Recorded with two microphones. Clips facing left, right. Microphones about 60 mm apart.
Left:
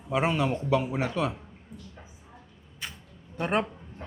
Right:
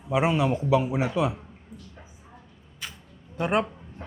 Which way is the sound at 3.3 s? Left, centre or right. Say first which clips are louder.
Right 3 dB; centre.